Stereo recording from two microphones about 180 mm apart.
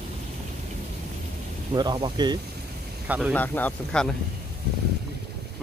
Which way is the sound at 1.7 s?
25° right (ahead or behind).